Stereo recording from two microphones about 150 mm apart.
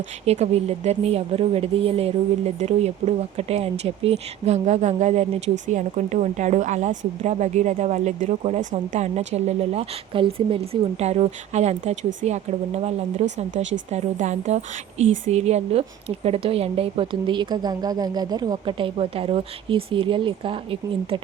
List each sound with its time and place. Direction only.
0.3 s a woman's voice: 45° right (ahead or behind)